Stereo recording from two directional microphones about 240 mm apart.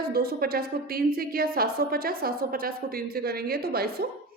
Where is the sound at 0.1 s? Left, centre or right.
Right.